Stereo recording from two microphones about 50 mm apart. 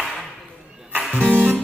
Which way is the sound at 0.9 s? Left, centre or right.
Right.